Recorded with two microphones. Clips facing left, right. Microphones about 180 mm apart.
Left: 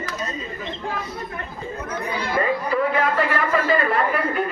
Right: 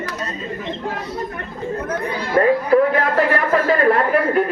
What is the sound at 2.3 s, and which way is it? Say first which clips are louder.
A man's voice: right 8 dB; 60° right (ahead or behind).